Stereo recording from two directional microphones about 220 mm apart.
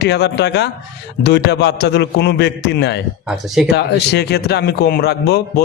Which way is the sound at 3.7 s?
50° left (ahead or behind).